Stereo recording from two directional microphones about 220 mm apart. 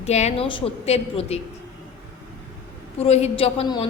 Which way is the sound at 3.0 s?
30° left (ahead or behind).